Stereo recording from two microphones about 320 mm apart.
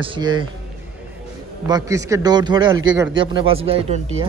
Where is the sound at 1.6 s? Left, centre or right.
Centre.